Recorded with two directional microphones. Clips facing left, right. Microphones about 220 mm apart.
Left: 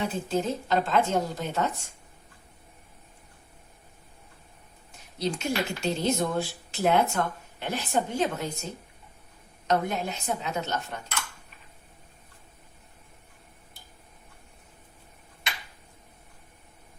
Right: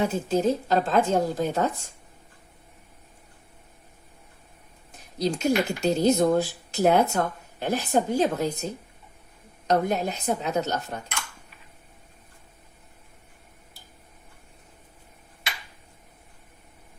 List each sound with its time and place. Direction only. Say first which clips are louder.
0.0 s speech: right 5 dB; 40° right (ahead or behind)
5.2 s speech: right 5 dB; 40° right (ahead or behind)